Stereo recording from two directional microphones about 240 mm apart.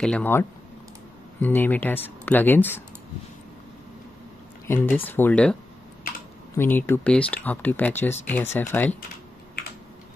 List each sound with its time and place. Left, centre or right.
0.0 s speech: centre
4.6 s speech: centre
6.0 s typing: left
6.5 s speech: centre